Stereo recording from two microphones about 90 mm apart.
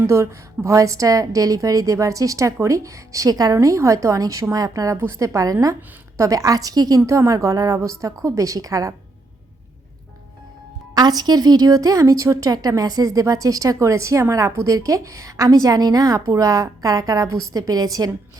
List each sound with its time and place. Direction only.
0.0 s a woman's voice: 30° right (ahead or behind)
7.0 s a woman's voice: 35° right (ahead or behind)
10.9 s a woman's voice: 50° right (ahead or behind)